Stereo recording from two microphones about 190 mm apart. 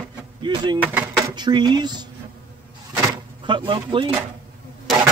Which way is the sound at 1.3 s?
25° right (ahead or behind).